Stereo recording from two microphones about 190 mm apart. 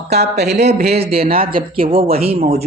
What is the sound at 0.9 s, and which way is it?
Speech, 30° right (ahead or behind).